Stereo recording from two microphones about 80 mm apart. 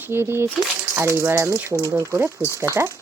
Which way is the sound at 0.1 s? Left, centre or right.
Right.